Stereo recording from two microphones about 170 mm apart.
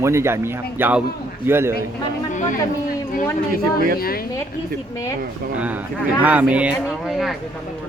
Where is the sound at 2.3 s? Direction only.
45° left (ahead or behind).